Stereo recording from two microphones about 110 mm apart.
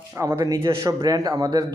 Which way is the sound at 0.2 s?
30° right (ahead or behind).